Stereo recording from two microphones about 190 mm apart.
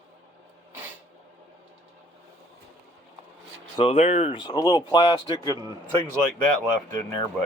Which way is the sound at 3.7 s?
30° left (ahead or behind).